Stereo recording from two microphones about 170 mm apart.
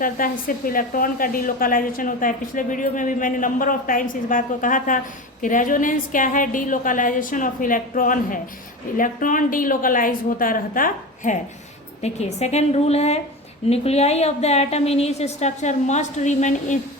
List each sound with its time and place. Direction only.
0.0 s a woman's voice: 55° left (ahead or behind)
12.0 s a woman's voice: 40° left (ahead or behind)